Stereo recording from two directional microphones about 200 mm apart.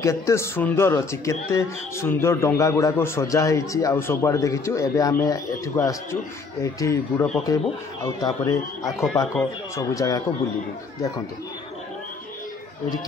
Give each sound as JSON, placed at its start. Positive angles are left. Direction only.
{"t": 0.0, "sound": "a man's voice", "side_deg": 15}